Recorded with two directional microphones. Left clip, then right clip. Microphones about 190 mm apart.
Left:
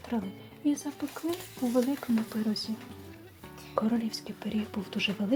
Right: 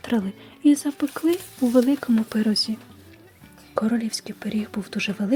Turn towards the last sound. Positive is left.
turn(degrees=-15)  # may be behind; listen again after turning